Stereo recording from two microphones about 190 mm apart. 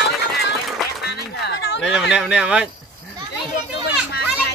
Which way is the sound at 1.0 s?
60° left (ahead or behind).